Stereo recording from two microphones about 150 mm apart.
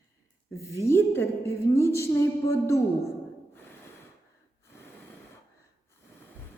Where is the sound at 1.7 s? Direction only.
20° left (ahead or behind).